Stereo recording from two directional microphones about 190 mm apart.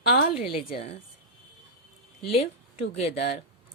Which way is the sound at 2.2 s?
30° left (ahead or behind).